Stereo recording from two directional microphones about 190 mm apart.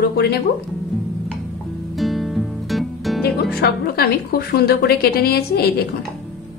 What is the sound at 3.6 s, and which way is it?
A woman's voice, 55° left (ahead or behind).